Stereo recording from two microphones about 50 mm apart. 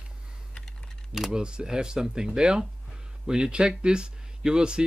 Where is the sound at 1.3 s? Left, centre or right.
Centre.